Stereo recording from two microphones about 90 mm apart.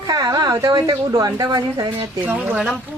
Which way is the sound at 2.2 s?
20° right (ahead or behind).